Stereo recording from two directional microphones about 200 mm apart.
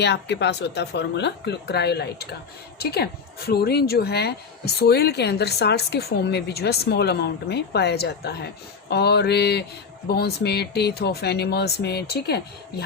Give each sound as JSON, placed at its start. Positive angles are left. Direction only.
{"t": 0.0, "sound": "a woman's voice", "side_deg": 60}